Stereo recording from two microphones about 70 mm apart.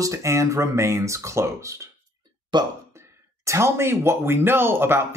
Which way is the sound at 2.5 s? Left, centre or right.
Right.